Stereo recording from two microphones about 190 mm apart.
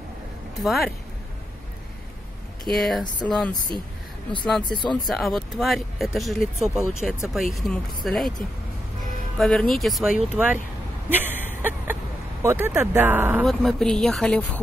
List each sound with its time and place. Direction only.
0.7 s speech: centre (ahead or behind)
2.7 s speech: centre (ahead or behind)
9.4 s speech: 5° left (ahead or behind)
11.1 s a sound: 10° right (ahead or behind)
13.5 s speech: 5° left (ahead or behind)